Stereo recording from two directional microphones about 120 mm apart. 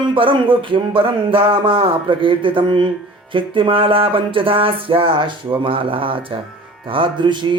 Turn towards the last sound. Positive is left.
turn(degrees=-40)  # may be behind; listen again after turning